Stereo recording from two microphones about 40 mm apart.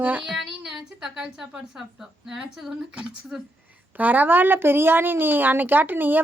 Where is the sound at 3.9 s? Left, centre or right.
Right.